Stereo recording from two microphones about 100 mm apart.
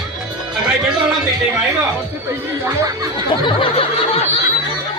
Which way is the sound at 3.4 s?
60° left (ahead or behind).